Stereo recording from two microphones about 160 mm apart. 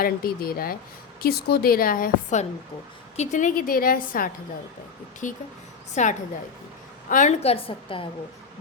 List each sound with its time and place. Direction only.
0.0 s speech: 65° left (ahead or behind)
1.2 s a woman's voice: 80° left; by 4.3 s 60° left (ahead or behind)
5.9 s a woman's voice: 50° left (ahead or behind)